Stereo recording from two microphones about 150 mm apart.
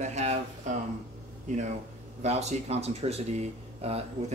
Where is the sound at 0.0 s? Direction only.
50° right (ahead or behind).